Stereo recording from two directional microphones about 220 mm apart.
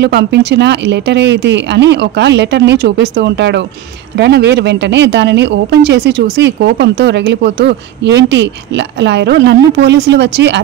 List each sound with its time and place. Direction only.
0.0 s speech: 50° right (ahead or behind)